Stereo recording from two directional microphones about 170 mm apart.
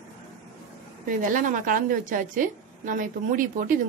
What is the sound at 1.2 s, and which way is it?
A woman's voice, 50° right (ahead or behind).